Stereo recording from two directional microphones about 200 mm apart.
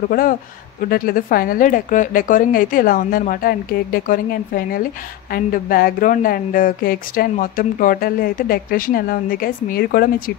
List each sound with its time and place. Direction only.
0.1 s speech: 45° left (ahead or behind)